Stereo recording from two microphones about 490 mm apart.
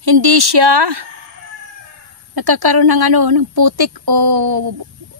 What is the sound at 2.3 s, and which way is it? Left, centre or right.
A woman's voice, right.